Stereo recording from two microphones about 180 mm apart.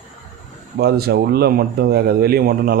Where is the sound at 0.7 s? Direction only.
60° right (ahead or behind).